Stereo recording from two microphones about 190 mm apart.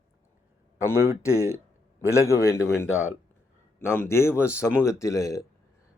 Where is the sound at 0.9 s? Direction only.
15° left (ahead or behind).